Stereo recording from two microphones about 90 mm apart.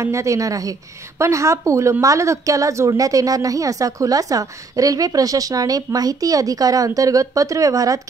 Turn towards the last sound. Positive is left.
turn(degrees=-40)  # may be behind; listen again after turning